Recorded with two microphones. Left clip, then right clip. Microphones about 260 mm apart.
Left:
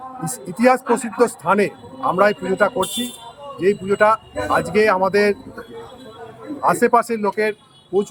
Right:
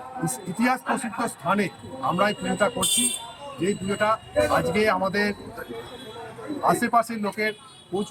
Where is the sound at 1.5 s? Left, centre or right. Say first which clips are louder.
Left 7 dB; centre.